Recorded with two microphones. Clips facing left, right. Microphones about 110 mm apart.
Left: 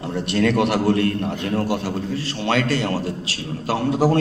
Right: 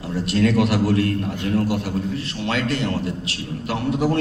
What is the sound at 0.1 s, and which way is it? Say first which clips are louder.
Speech: even; 60° left (ahead or behind).